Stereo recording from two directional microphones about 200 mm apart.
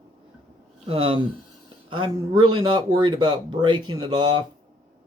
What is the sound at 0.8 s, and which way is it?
Speech, 25° right (ahead or behind).